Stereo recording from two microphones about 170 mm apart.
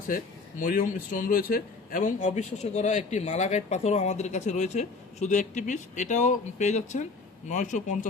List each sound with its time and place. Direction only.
0.6 s a man's voice: 50° left (ahead or behind)